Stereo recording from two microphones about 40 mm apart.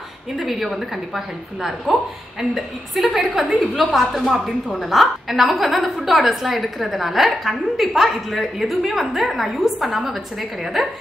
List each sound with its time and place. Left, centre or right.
0.5 s a woman's voice: centre